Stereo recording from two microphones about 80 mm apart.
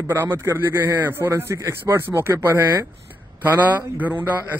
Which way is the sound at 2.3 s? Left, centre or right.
Right.